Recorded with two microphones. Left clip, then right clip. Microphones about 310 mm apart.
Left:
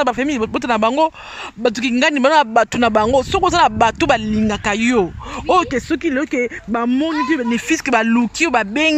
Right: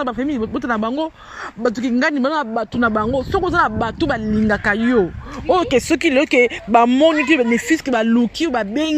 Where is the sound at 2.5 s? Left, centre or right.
Left.